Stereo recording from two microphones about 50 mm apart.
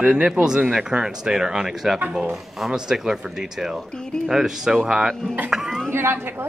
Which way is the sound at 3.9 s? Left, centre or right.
Centre.